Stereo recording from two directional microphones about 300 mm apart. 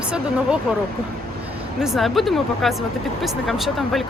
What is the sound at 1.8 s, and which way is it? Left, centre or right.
Speech, centre.